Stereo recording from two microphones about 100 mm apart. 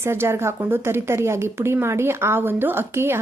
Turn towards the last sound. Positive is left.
turn(degrees=-25)  # may be behind; listen again after turning